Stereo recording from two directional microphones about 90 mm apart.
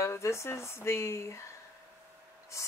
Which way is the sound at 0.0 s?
30° left (ahead or behind).